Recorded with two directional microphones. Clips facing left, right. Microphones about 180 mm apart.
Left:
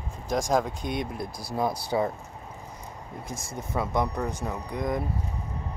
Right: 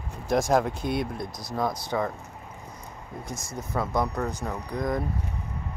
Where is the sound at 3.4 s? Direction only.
25° left (ahead or behind).